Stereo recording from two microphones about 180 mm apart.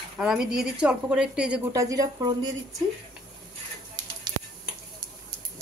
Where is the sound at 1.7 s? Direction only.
20° right (ahead or behind).